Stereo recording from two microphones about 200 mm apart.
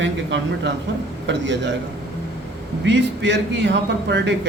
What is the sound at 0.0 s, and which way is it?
A man's voice, 60° right (ahead or behind).